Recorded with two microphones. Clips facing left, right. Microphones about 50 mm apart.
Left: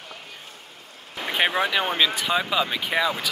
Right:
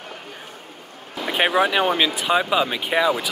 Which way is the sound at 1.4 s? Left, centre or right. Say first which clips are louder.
Right 4 dB; centre.